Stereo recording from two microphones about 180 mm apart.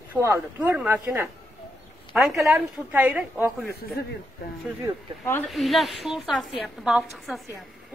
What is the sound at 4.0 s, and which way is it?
Speech, 60° left (ahead or behind).